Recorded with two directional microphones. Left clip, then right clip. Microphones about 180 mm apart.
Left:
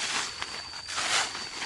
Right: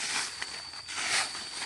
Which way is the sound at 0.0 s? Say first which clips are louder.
Left 2 dB; 20° right (ahead or behind).